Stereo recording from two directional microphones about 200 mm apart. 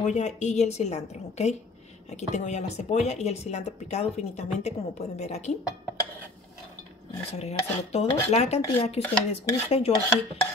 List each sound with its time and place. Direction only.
0.0 s speech: 35° left (ahead or behind)
7.3 s speech: 30° left (ahead or behind)